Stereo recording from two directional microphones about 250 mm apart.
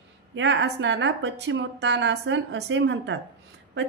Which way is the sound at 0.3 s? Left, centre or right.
Right.